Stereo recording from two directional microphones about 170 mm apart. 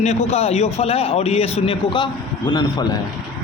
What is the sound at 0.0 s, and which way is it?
A man's voice, 40° left (ahead or behind).